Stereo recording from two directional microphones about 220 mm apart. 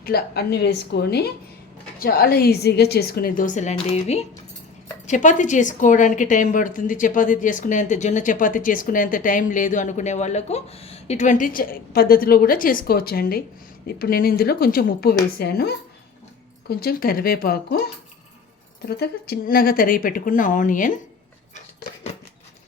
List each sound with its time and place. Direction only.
0.0 s a woman's voice: 45° left (ahead or behind)
18.9 s a woman's voice: 45° left (ahead or behind)
21.5 s scissors: 30° left (ahead or behind)